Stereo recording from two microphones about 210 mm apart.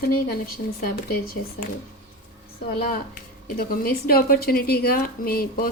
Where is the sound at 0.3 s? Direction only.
45° left (ahead or behind).